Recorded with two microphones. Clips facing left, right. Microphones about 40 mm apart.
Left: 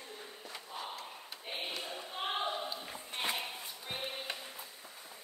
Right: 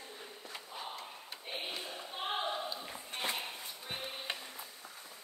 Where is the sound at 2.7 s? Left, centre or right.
Centre.